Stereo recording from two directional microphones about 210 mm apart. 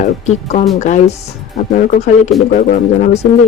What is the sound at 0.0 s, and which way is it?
Speech, 35° left (ahead or behind).